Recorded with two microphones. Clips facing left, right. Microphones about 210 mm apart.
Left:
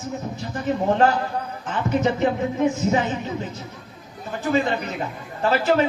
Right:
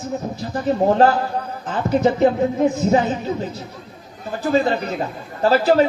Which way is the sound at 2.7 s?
35° right (ahead or behind).